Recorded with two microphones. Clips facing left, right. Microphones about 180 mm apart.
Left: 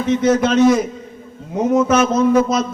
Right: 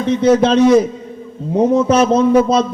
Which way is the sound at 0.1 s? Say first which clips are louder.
Right 3 dB; 35° right (ahead or behind).